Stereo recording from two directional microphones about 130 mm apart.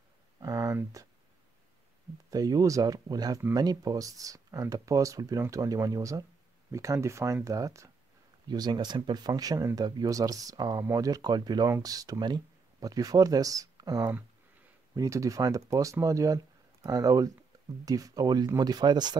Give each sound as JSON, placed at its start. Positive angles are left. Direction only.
{"t": 0.4, "sound": "speech", "side_deg": -25}
{"t": 2.3, "sound": "speech", "side_deg": -25}